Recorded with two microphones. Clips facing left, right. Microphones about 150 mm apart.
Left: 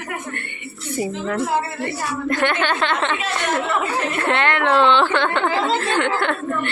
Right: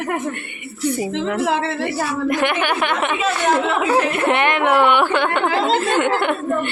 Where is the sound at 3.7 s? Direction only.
90° right.